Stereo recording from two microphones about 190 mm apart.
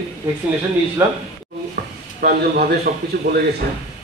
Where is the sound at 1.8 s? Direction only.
50° right (ahead or behind).